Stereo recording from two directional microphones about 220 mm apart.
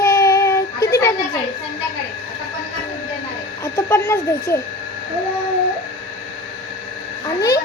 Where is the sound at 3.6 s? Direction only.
10° left (ahead or behind).